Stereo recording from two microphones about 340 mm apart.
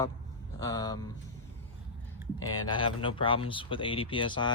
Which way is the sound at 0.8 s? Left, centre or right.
Centre.